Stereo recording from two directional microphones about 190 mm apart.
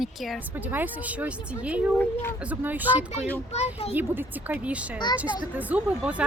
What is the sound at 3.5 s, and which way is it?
Speech, 35° left (ahead or behind).